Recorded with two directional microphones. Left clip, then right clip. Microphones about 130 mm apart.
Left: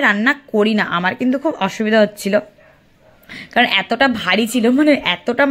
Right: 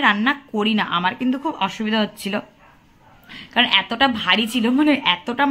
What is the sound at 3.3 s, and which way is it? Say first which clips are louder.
A woman's voice: left 2 dB; 45° left (ahead or behind).